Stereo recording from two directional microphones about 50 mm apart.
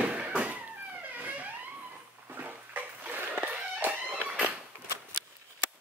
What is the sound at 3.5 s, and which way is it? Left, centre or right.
Music, right.